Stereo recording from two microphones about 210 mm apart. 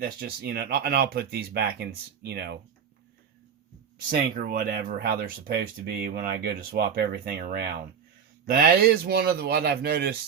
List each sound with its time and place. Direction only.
0.0 s speech: 45° right (ahead or behind)
4.4 s speech: 45° right (ahead or behind)